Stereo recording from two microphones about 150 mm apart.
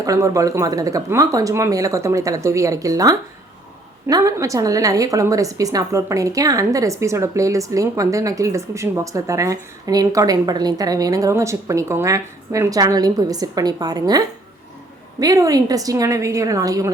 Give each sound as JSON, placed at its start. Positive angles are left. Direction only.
{"t": 0.0, "sound": "a woman's voice", "side_deg": -20}